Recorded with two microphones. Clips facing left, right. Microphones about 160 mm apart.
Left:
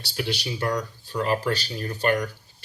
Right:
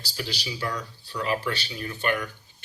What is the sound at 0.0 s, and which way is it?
Speech, 65° left (ahead or behind).